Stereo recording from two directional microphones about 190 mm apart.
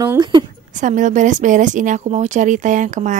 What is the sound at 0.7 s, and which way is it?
Speech, 40° right (ahead or behind).